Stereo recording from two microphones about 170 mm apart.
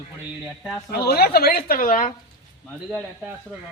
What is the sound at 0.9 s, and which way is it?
A woman's voice, 65° left (ahead or behind).